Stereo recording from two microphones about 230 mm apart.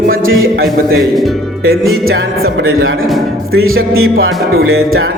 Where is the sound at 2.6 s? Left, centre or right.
Right.